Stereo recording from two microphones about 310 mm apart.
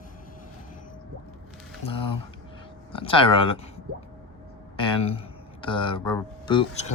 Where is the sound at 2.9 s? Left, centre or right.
Centre.